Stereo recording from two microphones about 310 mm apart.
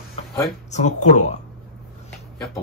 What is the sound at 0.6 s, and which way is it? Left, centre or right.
Speech, left.